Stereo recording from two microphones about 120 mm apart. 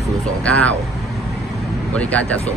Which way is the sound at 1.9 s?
10° left (ahead or behind).